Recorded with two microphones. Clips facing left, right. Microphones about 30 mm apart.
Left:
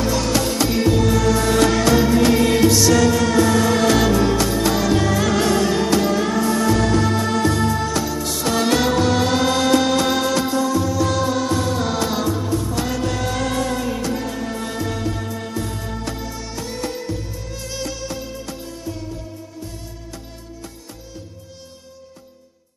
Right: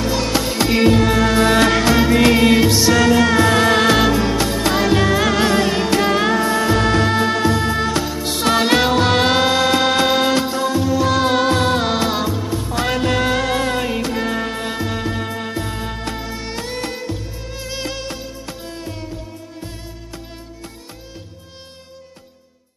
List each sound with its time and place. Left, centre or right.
0.0 s music: right
0.7 s music: right
2.0 s music: right
3.9 s music: right
9.5 s music: right
11.2 s music: right
12.7 s music: right
17.1 s music: right
17.8 s music: right